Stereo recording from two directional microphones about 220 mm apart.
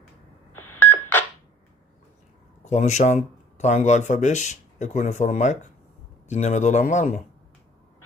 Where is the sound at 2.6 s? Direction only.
30° left (ahead or behind).